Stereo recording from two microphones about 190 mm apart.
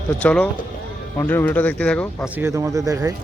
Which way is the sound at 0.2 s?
5° left (ahead or behind).